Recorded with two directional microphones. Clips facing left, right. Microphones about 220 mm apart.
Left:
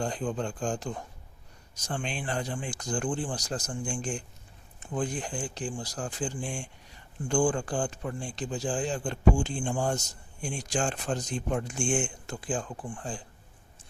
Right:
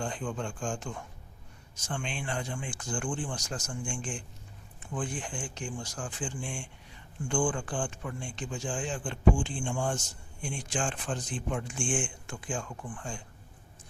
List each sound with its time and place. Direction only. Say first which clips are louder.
0.0 s speech: left 4 dB; 35° left (ahead or behind)